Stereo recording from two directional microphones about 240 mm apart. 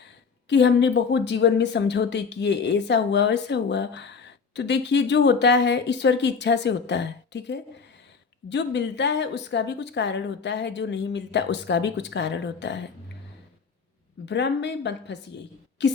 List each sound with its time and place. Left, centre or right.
0.4 s speech: left
14.3 s speech: left